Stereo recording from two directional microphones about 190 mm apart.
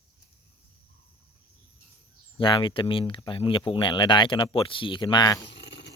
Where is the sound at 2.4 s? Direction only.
25° left (ahead or behind).